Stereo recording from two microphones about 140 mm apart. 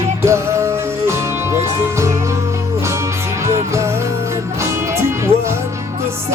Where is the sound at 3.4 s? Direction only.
20° right (ahead or behind).